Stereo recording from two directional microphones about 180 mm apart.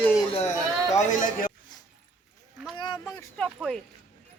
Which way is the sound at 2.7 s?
25° left (ahead or behind).